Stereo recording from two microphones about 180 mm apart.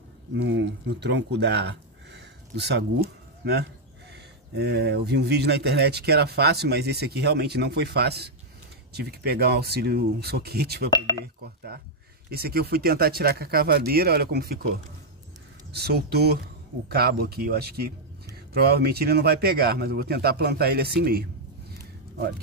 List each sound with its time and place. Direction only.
0.3 s speech: 90° right; by 14.6 s 60° right (ahead or behind)
15.7 s speech: 65° right (ahead or behind)